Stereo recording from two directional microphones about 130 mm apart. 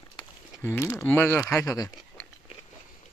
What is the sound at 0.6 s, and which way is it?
A man's voice, 20° left (ahead or behind).